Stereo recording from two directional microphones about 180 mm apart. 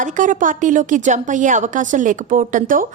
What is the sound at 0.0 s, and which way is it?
Speech, 45° right (ahead or behind).